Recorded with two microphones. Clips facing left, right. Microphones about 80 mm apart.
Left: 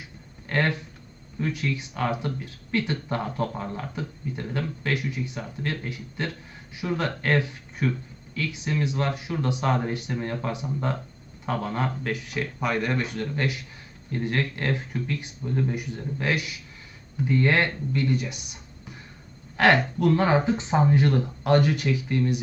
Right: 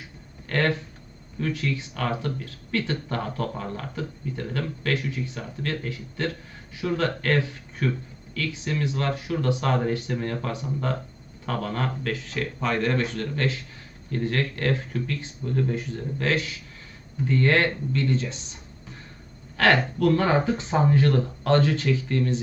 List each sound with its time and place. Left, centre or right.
0.4 s a sound: left
1.4 s speech: left
19.5 s speech: centre